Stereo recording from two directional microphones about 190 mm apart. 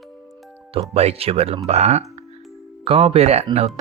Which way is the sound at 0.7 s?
30° right (ahead or behind).